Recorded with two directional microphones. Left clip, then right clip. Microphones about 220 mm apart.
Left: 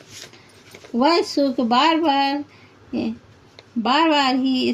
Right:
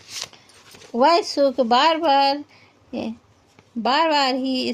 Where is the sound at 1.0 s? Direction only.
40° right (ahead or behind).